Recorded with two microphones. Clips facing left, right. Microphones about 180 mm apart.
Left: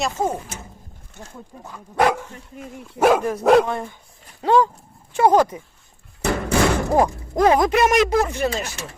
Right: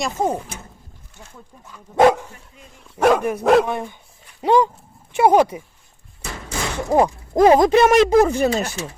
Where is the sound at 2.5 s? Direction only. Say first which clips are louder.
Left 11 dB; 45° left (ahead or behind).